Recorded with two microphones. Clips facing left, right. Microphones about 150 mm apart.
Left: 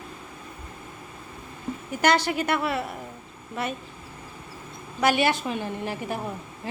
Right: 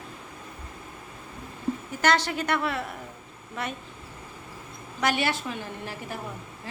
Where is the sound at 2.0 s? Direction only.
10° left (ahead or behind).